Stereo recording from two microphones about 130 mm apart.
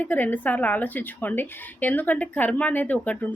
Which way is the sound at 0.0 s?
15° left (ahead or behind).